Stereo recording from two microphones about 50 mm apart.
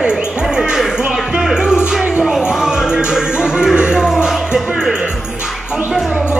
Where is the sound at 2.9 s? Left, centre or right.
Centre.